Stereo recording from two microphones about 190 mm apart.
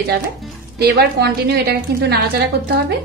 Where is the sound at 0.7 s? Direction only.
55° right (ahead or behind).